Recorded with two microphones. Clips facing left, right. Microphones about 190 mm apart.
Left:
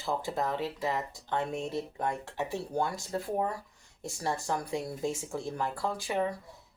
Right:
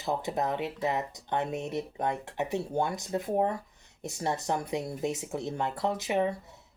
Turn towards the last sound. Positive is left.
turn(degrees=-25)  # may be behind; listen again after turning